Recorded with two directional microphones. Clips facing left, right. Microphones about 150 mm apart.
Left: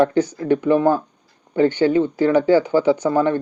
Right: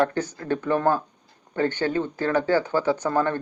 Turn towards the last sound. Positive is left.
turn(degrees=15)  # may be behind; listen again after turning